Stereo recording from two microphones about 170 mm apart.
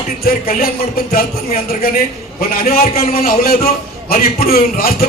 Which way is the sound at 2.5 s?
60° left (ahead or behind).